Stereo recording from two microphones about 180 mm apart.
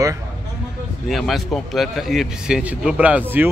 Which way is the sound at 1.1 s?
Centre (ahead or behind).